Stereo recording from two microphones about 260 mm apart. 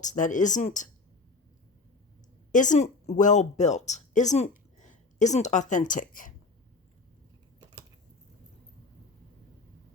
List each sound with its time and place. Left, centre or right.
0.0 s speech: left
2.5 s speech: left